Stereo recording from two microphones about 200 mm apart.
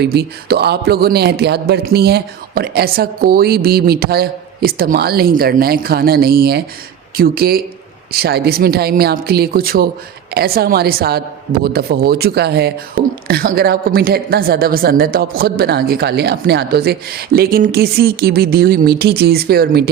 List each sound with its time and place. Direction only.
0.0 s a woman's voice: 55° right (ahead or behind)